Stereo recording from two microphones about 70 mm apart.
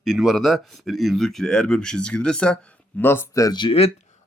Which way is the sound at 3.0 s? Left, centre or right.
Left.